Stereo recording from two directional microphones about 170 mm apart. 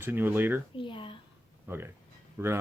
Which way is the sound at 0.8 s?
30° left (ahead or behind).